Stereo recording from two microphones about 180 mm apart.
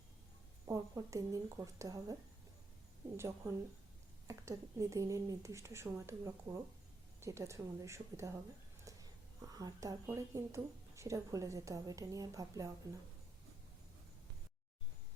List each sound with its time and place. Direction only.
0.7 s speech: 20° right (ahead or behind)
3.2 s a woman's voice: 15° right (ahead or behind)